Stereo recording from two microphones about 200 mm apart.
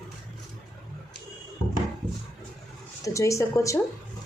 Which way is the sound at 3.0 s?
15° left (ahead or behind).